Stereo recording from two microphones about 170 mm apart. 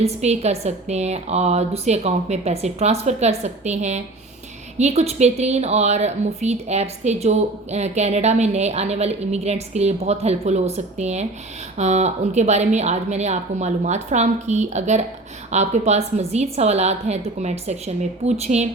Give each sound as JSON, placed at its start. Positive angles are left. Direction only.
{"t": 0.0, "sound": "a woman's voice", "side_deg": -40}